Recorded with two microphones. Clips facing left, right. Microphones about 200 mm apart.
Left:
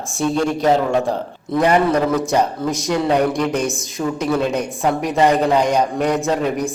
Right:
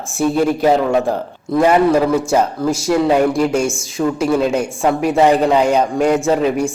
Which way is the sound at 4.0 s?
Centre (ahead or behind).